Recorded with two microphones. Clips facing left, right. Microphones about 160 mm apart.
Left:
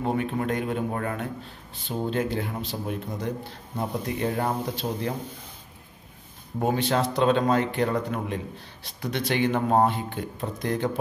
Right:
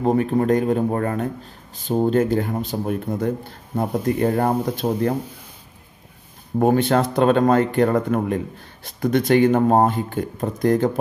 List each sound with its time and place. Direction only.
0.0 s a man's voice: 40° right (ahead or behind)
6.6 s a man's voice: 55° right (ahead or behind)